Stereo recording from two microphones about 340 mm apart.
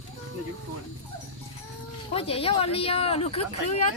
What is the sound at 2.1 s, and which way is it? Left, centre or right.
Speech, centre.